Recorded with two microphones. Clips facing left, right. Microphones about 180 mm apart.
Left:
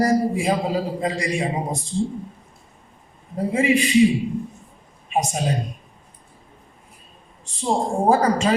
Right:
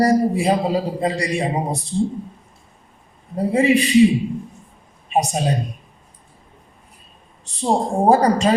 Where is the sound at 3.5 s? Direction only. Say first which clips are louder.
Right 3 dB; 35° right (ahead or behind).